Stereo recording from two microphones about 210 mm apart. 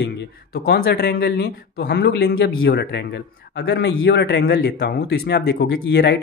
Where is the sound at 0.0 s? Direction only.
50° left (ahead or behind).